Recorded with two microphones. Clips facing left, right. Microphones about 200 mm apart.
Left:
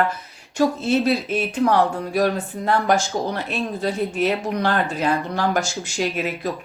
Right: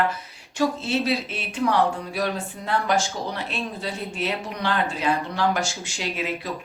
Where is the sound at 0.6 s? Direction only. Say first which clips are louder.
Left 5 dB; 45° left (ahead or behind).